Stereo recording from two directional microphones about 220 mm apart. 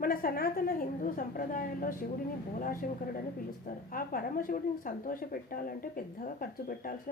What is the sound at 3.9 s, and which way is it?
A woman's voice, 40° left (ahead or behind).